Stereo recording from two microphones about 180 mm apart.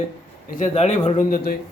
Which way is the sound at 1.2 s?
55° left (ahead or behind).